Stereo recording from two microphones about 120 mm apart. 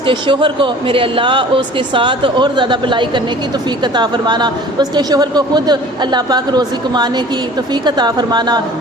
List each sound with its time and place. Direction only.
0.0 s speech: 45° right (ahead or behind)